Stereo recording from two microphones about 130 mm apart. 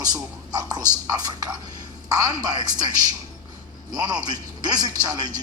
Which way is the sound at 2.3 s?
30° right (ahead or behind).